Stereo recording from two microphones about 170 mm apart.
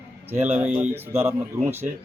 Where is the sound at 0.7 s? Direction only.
45° right (ahead or behind).